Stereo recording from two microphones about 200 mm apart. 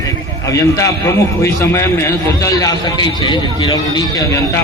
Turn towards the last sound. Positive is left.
turn(degrees=15)  # may be behind; listen again after turning